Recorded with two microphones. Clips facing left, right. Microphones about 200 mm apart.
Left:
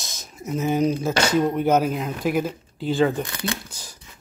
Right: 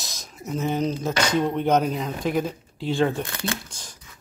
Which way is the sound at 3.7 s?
5° left (ahead or behind).